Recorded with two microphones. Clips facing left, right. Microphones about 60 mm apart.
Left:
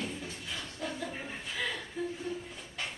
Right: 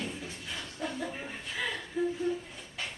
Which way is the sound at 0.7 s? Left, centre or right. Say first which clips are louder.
Right 3 dB; centre.